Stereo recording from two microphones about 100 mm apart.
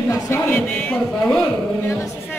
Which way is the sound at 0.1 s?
20° left (ahead or behind).